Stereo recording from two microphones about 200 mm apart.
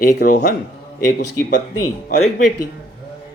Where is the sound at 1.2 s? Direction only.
60° left (ahead or behind).